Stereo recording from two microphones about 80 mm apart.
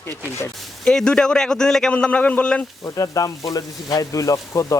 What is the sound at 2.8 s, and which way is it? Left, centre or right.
A man's voice, left.